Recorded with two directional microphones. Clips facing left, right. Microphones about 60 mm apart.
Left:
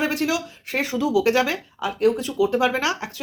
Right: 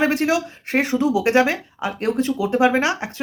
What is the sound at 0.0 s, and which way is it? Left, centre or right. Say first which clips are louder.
Speech: right 4 dB; right.